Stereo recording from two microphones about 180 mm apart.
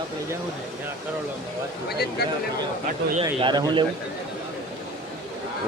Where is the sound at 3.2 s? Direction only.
25° right (ahead or behind).